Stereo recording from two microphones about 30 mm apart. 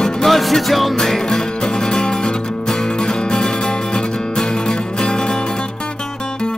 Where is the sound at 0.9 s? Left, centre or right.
Centre.